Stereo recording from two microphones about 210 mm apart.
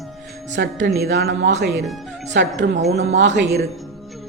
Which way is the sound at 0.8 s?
50° right (ahead or behind).